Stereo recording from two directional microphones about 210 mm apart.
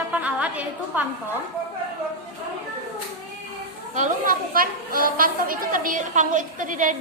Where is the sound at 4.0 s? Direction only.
40° right (ahead or behind).